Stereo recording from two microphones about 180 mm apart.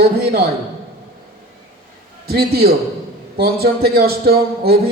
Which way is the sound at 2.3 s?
60° right (ahead or behind).